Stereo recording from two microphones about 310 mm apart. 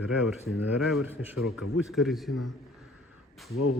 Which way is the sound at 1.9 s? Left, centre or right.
Centre.